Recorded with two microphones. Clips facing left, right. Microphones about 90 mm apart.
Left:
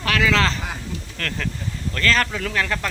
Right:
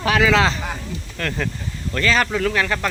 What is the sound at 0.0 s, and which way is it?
Speech, 15° right (ahead or behind).